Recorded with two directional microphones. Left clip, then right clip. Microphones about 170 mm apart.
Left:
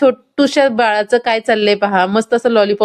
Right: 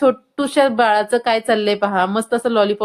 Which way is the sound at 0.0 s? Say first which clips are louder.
Left 4 dB; 30° left (ahead or behind).